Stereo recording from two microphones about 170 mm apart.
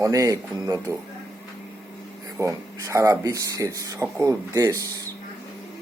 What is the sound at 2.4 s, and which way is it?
Speech, 15° right (ahead or behind).